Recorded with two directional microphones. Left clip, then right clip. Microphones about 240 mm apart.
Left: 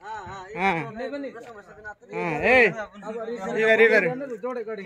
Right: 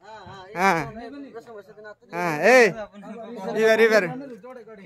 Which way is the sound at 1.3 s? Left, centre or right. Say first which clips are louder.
Right 1 dB; centre.